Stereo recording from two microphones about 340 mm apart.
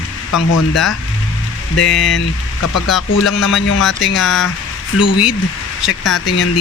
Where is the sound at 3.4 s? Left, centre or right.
Left.